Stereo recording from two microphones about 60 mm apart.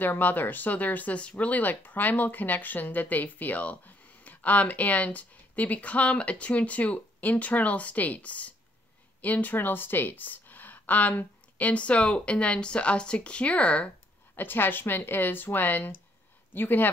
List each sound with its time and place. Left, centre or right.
0.0 s speech: left
14.3 s speech: left